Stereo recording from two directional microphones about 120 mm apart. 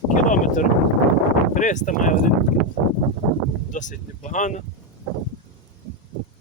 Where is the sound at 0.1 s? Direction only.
90° left.